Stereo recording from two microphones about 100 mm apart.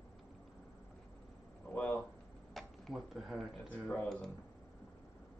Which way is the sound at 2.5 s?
Centre (ahead or behind).